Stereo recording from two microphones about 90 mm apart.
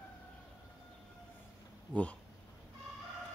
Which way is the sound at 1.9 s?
15° left (ahead or behind).